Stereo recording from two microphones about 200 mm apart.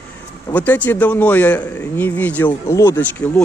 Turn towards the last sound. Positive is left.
turn(degrees=10)  # may be behind; listen again after turning